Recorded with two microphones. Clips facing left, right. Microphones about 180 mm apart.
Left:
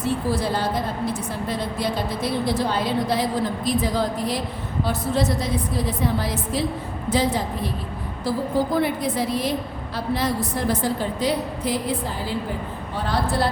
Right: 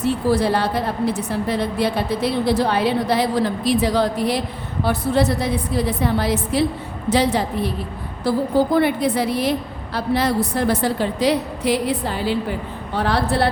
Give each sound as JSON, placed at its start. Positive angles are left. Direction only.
{"t": 0.0, "sound": "a woman's voice", "side_deg": -70}
{"t": 8.7, "sound": "a woman's voice", "side_deg": -70}